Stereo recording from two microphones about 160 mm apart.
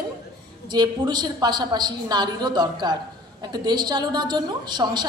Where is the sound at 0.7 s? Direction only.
25° right (ahead or behind).